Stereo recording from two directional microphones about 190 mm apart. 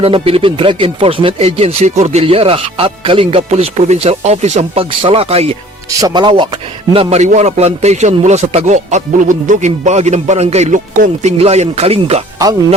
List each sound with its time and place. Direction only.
0.0 s speech: 30° right (ahead or behind)